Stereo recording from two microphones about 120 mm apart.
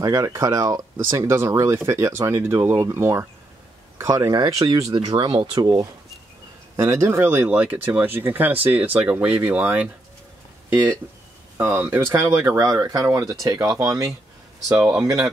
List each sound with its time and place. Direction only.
0.0 s speech: 25° right (ahead or behind)
6.8 s speech: 20° right (ahead or behind)